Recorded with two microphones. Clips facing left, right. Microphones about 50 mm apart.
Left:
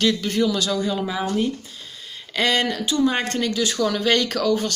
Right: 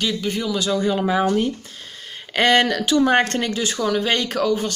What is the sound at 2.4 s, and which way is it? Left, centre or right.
Speech, right.